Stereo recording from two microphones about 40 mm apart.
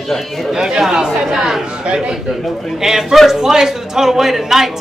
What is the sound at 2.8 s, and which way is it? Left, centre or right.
Speech, centre.